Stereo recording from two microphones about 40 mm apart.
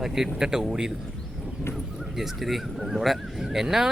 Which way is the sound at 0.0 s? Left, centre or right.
Centre.